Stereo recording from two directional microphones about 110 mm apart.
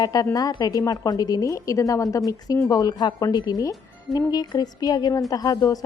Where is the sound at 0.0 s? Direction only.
35° left (ahead or behind).